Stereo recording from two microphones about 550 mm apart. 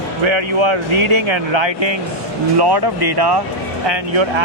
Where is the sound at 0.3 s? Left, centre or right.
Right.